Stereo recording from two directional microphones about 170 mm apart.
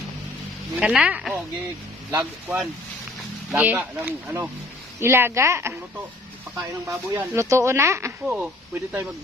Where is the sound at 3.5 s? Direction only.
10° right (ahead or behind).